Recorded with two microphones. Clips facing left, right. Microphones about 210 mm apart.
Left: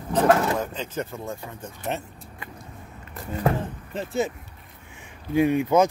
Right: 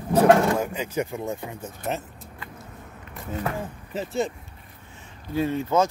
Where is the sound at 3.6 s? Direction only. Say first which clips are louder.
Even; centre (ahead or behind).